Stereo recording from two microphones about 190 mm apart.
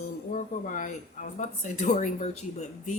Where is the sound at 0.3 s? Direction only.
40° left (ahead or behind).